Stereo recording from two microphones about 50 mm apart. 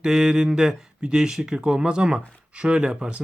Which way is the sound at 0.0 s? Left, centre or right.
Centre.